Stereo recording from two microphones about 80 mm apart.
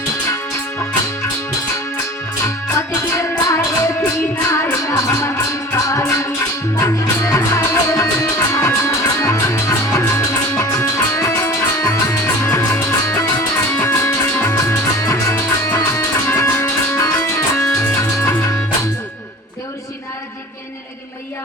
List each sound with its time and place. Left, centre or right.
2.4 s music: left
16.2 s music: left